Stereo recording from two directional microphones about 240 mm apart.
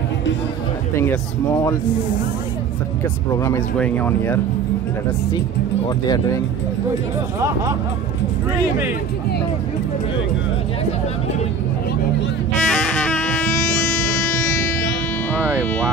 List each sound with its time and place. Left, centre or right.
0.9 s speech: centre
3.3 s speech: centre
12.6 s music: centre